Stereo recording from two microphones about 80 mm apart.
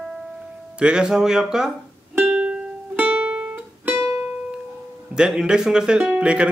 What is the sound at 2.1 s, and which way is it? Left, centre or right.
Music, centre.